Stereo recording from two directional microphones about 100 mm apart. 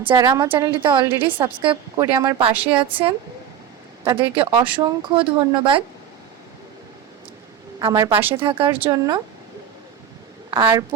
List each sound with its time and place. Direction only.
0.2 s speech: 40° right (ahead or behind)
0.7 s a woman's voice: 55° right (ahead or behind)
2.0 s speech: 40° right (ahead or behind)
2.4 s speech: 65° right (ahead or behind)
7.8 s speech: 35° right (ahead or behind)
8.3 s speech: 65° right (ahead or behind)
8.9 s a woman's voice: 45° right (ahead or behind)
10.5 s a woman's voice: 45° right (ahead or behind)